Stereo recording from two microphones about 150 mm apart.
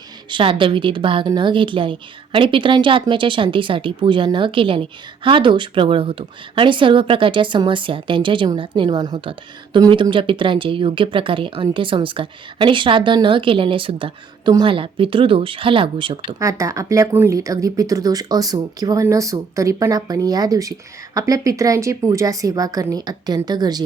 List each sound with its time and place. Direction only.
0.3 s a woman's voice: 35° right (ahead or behind)
16.4 s speech: 20° right (ahead or behind)